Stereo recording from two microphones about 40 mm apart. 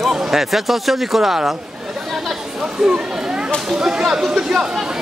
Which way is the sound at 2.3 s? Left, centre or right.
Centre.